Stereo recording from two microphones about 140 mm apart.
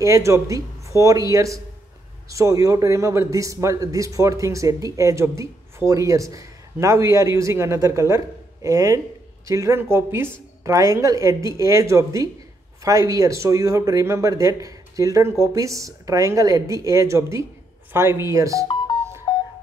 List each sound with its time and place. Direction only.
0.0 s a man's voice: 20° right (ahead or behind)
19.3 s telephone dialing: 40° left (ahead or behind)